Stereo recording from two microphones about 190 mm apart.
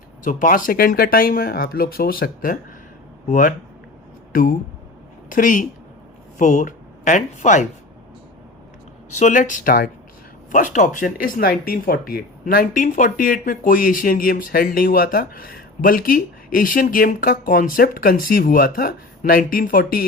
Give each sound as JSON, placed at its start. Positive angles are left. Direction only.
{"t": 0.3, "sound": "speech", "side_deg": 45}
{"t": 9.1, "sound": "speech", "side_deg": 40}